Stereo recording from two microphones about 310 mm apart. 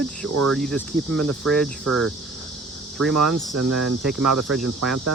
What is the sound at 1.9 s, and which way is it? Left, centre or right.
Speech, right.